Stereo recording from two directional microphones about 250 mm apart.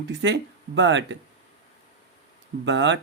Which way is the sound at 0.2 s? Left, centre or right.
Right.